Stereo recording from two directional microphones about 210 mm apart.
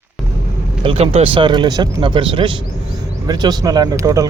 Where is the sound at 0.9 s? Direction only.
30° right (ahead or behind).